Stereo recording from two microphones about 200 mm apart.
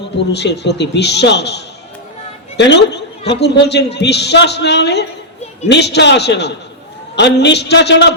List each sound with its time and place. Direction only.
0.3 s a man's voice: 55° left (ahead or behind)